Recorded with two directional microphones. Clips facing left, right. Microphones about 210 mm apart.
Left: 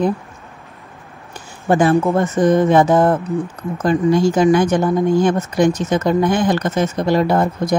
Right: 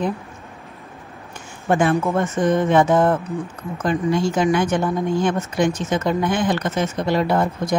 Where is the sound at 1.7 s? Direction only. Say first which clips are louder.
Left 4 dB; 35° left (ahead or behind).